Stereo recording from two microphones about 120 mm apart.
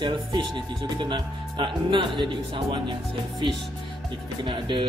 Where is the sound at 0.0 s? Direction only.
40° right (ahead or behind).